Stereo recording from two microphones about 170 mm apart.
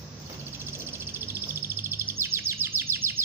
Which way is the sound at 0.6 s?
15° right (ahead or behind).